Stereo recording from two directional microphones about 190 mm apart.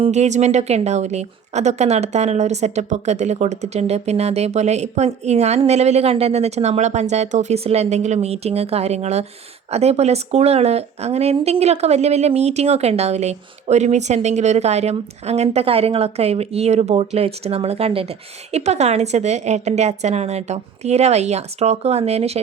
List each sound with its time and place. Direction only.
0.0 s speech: 35° right (ahead or behind)